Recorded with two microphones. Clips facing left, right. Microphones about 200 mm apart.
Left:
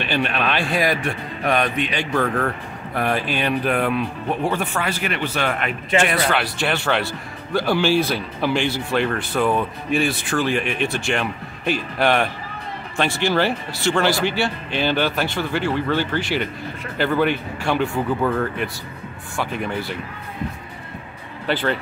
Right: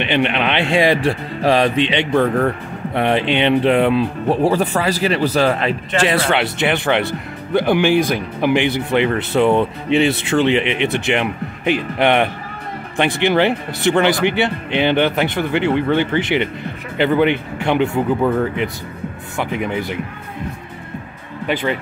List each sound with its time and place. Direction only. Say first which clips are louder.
0.0 s speech: right 5 dB; 20° right (ahead or behind)
19.3 s speech: right 3 dB; 15° right (ahead or behind)